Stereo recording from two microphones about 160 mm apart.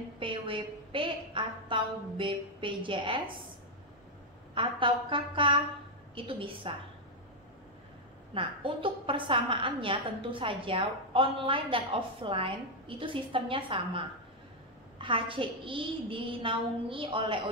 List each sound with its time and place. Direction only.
0.2 s a sound: 30° right (ahead or behind)
4.6 s a woman's voice: 30° right (ahead or behind)
8.4 s a woman's voice: 35° right (ahead or behind)